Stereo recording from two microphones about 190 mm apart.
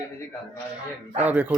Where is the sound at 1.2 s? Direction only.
10° right (ahead or behind).